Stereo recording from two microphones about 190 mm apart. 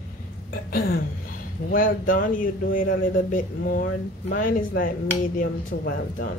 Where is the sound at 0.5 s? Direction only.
55° left (ahead or behind).